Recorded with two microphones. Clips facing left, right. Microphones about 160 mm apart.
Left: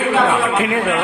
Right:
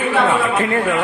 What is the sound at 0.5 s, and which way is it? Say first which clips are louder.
Speech: even; 10° left (ahead or behind).